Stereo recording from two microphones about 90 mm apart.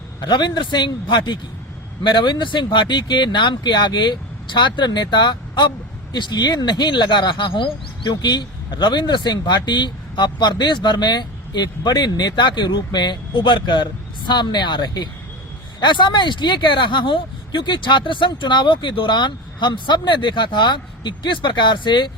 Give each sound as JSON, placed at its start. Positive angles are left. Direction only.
{"t": 0.2, "sound": "speech", "side_deg": 55}